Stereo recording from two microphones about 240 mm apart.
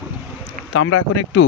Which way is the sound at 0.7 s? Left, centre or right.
Left.